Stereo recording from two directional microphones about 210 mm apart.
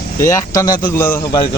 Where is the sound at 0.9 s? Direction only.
10° left (ahead or behind).